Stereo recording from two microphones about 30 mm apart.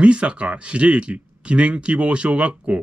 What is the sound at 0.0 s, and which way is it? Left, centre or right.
Speech, right.